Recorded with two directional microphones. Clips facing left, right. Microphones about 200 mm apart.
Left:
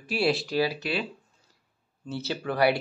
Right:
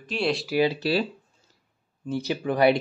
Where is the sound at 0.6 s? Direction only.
30° right (ahead or behind).